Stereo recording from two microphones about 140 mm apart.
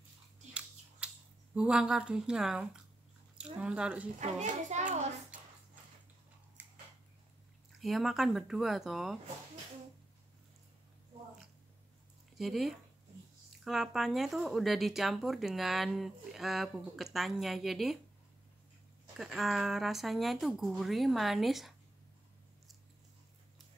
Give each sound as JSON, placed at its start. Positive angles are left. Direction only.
{"t": 0.6, "sound": "a sound", "side_deg": -10}
{"t": 3.3, "sound": "speech", "side_deg": -5}
{"t": 4.2, "sound": "a child's voice", "side_deg": -55}
{"t": 7.8, "sound": "speech", "side_deg": 0}
{"t": 12.4, "sound": "speech", "side_deg": 0}
{"t": 19.1, "sound": "speech", "side_deg": 0}